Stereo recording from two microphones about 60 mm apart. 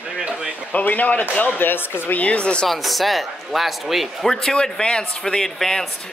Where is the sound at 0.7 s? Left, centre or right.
Left.